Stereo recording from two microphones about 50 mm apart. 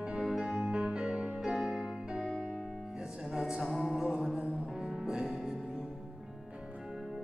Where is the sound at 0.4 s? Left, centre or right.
Centre.